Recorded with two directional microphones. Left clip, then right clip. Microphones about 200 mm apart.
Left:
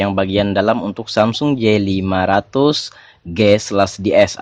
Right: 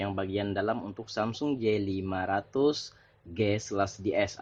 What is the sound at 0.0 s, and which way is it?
Speech, 45° left (ahead or behind).